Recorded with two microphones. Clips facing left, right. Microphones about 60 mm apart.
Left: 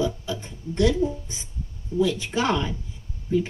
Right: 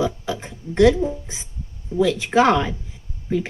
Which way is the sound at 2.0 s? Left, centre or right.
Right.